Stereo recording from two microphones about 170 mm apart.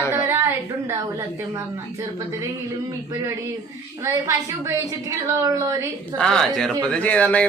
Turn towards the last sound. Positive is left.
turn(degrees=10)  # may be behind; listen again after turning